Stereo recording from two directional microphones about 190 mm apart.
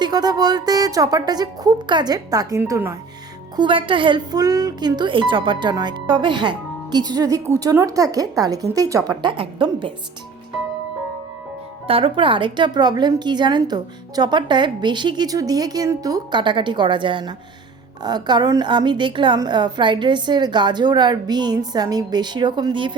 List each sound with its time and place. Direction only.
0.0 s speech: 20° right (ahead or behind)
3.5 s speech: 25° right (ahead or behind)
11.9 s speech: 30° right (ahead or behind)